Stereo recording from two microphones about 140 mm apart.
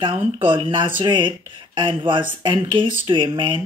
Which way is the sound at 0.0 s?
40° right (ahead or behind).